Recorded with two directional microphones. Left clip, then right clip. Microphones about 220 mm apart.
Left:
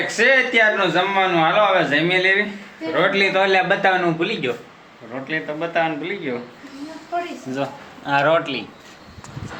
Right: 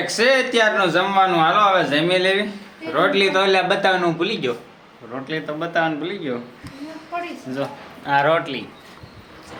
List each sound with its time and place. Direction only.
0.0 s a man's voice: 10° right (ahead or behind)
7.5 s speech: centre (ahead or behind)